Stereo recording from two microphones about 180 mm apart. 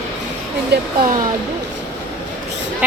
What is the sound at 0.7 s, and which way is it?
Speech, 70° right (ahead or behind).